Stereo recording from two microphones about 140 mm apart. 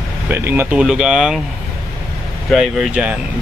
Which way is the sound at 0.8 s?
5° right (ahead or behind).